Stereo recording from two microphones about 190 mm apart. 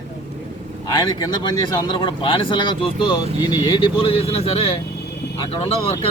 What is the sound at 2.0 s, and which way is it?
Speech, 25° left (ahead or behind).